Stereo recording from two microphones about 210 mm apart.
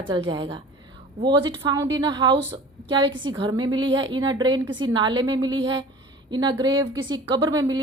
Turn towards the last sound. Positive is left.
turn(degrees=-20)  # may be behind; listen again after turning